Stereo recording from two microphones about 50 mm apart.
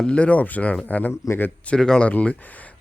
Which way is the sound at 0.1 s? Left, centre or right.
Left.